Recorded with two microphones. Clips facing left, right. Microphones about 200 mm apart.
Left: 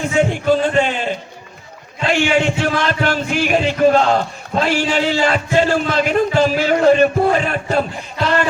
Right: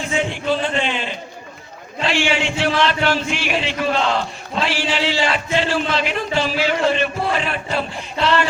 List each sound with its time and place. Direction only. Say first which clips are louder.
0.2 s music: left 7 dB; 45° left (ahead or behind)
5.5 s speech: left 5 dB; 45° left (ahead or behind)